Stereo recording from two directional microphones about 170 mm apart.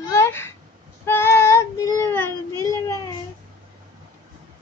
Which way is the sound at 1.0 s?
15° left (ahead or behind).